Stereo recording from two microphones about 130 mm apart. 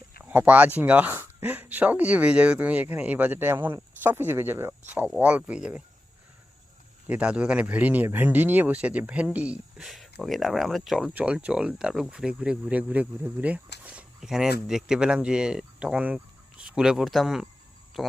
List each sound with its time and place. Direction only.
0.3 s speech: 10° right (ahead or behind)
7.1 s speech: 10° right (ahead or behind)